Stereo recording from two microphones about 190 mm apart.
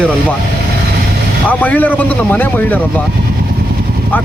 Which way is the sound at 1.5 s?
10° left (ahead or behind).